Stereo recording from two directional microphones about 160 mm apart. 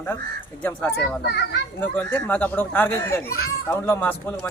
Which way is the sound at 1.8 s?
10° left (ahead or behind).